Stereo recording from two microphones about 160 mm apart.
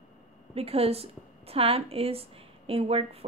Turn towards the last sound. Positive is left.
turn(degrees=-35)  # may be behind; listen again after turning